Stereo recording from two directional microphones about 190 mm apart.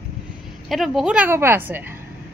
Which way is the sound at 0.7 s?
Centre (ahead or behind).